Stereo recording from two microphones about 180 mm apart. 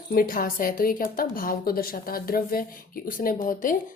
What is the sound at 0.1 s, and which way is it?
A woman's voice, 55° left (ahead or behind).